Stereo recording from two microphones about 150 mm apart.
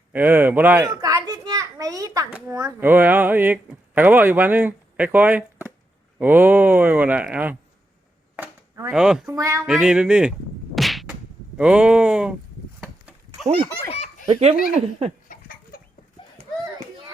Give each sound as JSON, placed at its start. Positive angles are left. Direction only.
{"t": 0.1, "sound": "a child's voice", "side_deg": -10}
{"t": 2.8, "sound": "speech", "side_deg": -10}
{"t": 8.4, "sound": "a sound", "side_deg": -20}
{"t": 8.9, "sound": "speech", "side_deg": -5}
{"t": 9.3, "sound": "speech", "side_deg": -20}
{"t": 9.6, "sound": "speech", "side_deg": -5}
{"t": 10.8, "sound": "whip", "side_deg": 0}
{"t": 12.8, "sound": "a sound", "side_deg": -10}
{"t": 14.3, "sound": "speech", "side_deg": -45}
{"t": 15.3, "sound": "chicken", "side_deg": 75}